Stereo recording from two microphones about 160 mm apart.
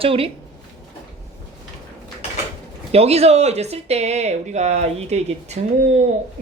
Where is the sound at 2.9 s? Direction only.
40° right (ahead or behind).